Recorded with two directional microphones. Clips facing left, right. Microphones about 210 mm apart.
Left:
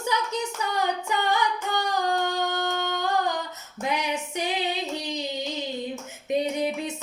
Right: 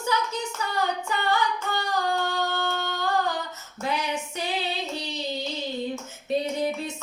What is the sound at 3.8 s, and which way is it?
Female singing, 15° left (ahead or behind).